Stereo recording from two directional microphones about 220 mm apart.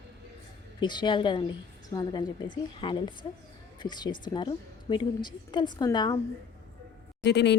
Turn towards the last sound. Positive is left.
turn(degrees=50)  # may be behind; listen again after turning